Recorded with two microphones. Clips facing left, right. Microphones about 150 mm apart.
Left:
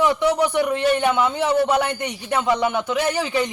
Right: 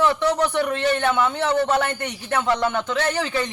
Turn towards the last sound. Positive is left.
turn(degrees=15)  # may be behind; listen again after turning